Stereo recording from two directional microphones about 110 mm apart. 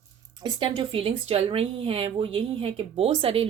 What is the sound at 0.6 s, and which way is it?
Speech, 55° right (ahead or behind).